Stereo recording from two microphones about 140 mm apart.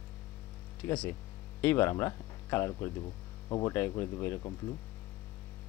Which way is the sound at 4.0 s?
15° left (ahead or behind).